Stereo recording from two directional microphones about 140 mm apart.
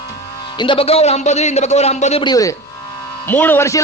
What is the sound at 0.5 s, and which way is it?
A man's voice, 35° left (ahead or behind).